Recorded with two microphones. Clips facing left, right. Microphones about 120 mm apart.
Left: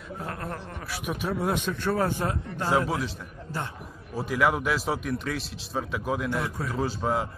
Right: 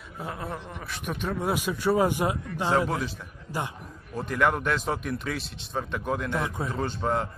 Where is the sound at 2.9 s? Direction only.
Centre (ahead or behind).